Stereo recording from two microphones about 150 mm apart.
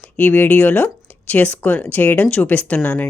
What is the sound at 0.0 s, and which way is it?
Speech, 10° left (ahead or behind).